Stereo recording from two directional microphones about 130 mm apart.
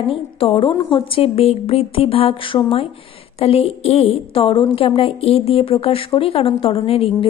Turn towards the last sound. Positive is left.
turn(degrees=45)  # may be behind; listen again after turning